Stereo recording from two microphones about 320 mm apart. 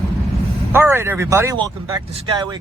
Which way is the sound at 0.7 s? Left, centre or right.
Centre.